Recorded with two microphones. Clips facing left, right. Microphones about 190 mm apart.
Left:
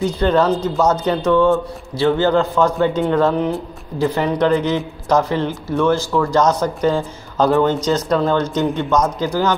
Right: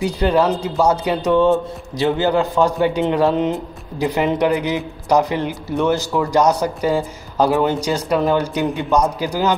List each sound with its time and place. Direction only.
0.0 s a man's voice: 10° right (ahead or behind)